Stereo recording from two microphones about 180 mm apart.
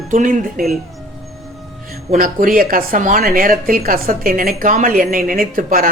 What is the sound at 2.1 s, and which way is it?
Speech, 50° right (ahead or behind).